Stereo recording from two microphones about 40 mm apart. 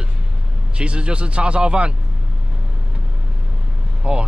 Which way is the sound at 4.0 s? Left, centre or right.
Right.